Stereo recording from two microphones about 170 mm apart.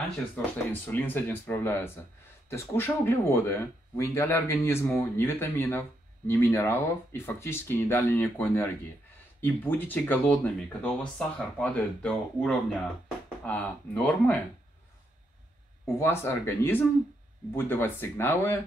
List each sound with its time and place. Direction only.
0.8 s speech: 10° left (ahead or behind)
16.0 s speech: 15° left (ahead or behind)